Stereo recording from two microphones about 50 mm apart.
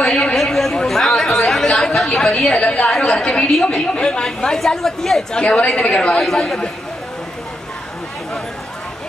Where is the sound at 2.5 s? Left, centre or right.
Left.